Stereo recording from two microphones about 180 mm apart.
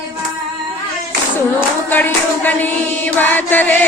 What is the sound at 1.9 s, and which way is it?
Music, 10° left (ahead or behind).